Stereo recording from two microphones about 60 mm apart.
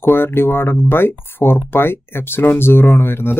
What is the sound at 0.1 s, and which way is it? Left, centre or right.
Speech, left.